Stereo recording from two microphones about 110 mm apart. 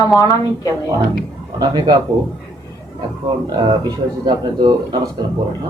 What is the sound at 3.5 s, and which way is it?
Speech, 40° right (ahead or behind).